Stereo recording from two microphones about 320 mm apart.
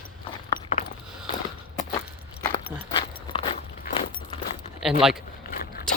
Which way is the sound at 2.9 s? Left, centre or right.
Centre.